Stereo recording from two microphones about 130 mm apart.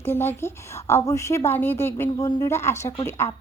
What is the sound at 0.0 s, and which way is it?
Speech, 20° left (ahead or behind).